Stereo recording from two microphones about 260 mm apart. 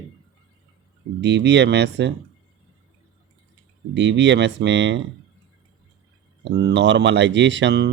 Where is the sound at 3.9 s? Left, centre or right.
Right.